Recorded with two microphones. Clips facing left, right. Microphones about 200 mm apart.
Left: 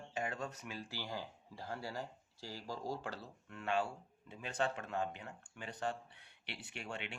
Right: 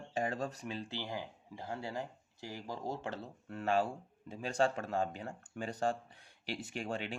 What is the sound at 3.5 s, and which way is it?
Speech, 35° right (ahead or behind).